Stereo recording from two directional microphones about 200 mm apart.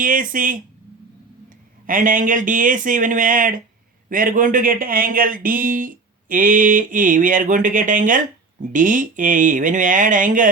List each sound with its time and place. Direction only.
0.0 s speech: 40° right (ahead or behind)
1.9 s speech: 40° right (ahead or behind)